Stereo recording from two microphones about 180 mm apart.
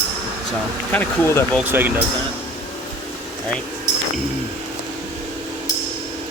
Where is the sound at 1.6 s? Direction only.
10° right (ahead or behind).